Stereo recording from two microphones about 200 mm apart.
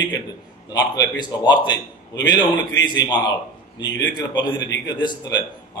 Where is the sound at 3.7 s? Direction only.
65° left (ahead or behind).